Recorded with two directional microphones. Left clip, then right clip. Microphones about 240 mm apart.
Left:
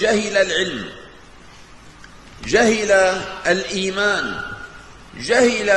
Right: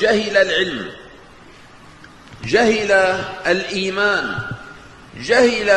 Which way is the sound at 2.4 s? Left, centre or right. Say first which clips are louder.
Right 1 dB; left.